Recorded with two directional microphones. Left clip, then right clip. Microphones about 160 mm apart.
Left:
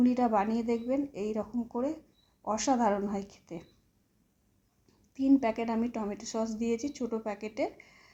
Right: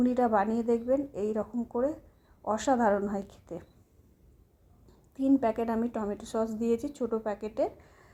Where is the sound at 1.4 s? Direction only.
30° right (ahead or behind).